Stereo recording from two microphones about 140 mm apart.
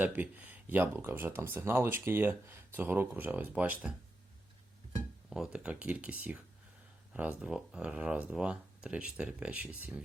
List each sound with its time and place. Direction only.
0.0 s speech: 15° right (ahead or behind)
5.3 s speech: 5° right (ahead or behind)